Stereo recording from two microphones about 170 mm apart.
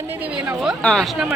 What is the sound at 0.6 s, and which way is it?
Speech, centre (ahead or behind).